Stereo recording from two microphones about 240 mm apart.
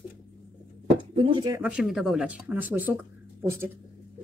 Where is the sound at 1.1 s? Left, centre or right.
Right.